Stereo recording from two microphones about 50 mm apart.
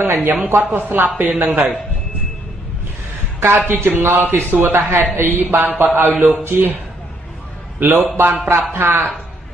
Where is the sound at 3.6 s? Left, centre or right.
Right.